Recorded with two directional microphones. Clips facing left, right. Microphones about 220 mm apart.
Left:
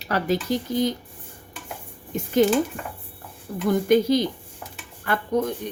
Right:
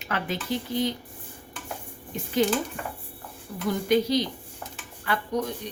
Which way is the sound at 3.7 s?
50° left (ahead or behind).